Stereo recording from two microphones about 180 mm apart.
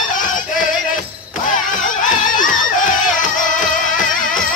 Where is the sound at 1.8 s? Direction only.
45° left (ahead or behind).